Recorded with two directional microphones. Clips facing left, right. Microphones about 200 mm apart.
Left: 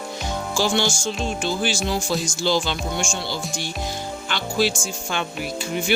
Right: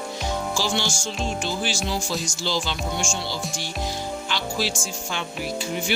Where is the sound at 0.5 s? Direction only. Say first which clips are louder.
Left 7 dB; 55° left (ahead or behind).